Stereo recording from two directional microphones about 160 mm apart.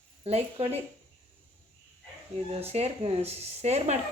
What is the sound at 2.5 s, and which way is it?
Speech, 40° right (ahead or behind).